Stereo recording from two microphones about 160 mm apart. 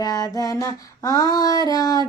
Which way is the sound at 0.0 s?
25° left (ahead or behind).